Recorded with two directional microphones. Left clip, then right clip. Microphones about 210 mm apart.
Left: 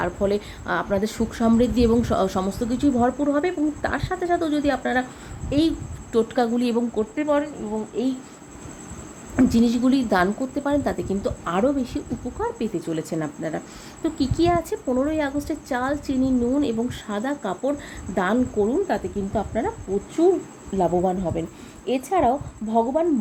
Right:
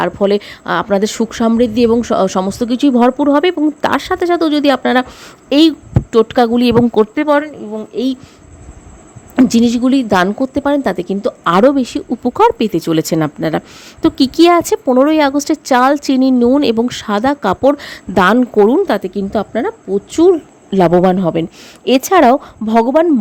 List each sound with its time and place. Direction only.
0.0 s a woman's voice: 40° right (ahead or behind)
9.3 s a woman's voice: 40° right (ahead or behind)